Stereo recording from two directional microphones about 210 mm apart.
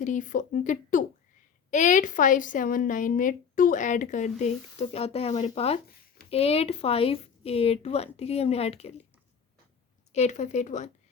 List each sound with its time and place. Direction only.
0.0 s a woman's voice: 35° left (ahead or behind)
10.1 s speech: 35° left (ahead or behind)